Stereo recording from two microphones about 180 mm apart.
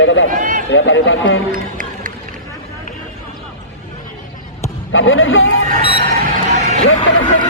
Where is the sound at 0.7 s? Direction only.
90° left.